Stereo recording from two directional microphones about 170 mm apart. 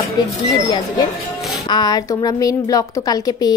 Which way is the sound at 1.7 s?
25° left (ahead or behind).